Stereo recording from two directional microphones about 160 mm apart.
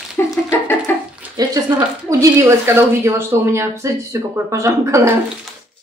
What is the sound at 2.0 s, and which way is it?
Speech, 20° right (ahead or behind).